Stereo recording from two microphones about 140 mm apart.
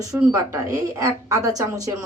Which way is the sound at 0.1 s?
25° right (ahead or behind).